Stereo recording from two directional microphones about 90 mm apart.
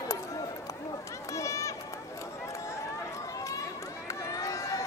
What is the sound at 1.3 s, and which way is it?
Run, 35° left (ahead or behind).